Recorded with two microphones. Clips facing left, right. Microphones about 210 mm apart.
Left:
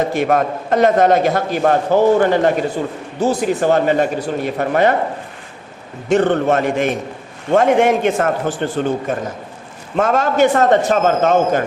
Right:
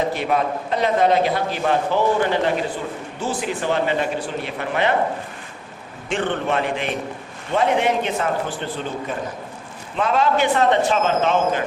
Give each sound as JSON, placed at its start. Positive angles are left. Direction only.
{"t": 0.0, "sound": "a man's voice", "side_deg": 45}
{"t": 6.1, "sound": "a man's voice", "side_deg": 40}